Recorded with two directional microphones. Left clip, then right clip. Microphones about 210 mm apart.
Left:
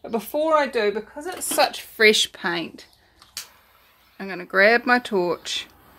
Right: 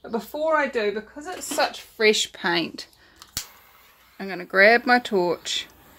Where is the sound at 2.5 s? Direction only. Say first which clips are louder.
Right 2 dB; 10° right (ahead or behind).